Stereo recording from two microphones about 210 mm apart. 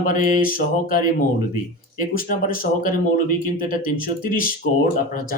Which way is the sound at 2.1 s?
40° left (ahead or behind).